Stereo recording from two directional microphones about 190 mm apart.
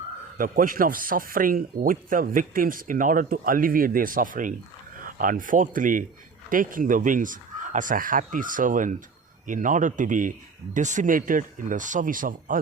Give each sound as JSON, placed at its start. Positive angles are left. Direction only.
{"t": 0.3, "sound": "speech", "side_deg": -45}